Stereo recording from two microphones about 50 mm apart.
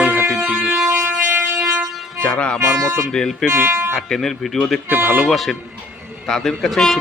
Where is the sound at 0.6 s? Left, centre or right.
Right.